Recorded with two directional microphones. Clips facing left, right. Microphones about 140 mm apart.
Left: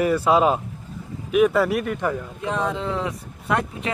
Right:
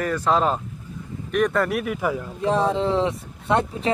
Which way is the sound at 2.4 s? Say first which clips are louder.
Right 5 dB; 30° right (ahead or behind).